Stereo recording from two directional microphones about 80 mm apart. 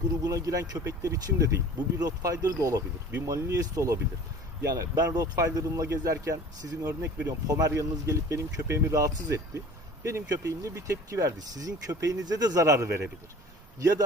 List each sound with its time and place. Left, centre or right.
0.3 s speech: right
4.6 s speech: right
11.3 s speech: right